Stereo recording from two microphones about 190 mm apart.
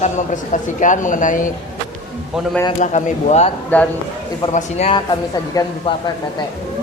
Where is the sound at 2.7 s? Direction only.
40° left (ahead or behind).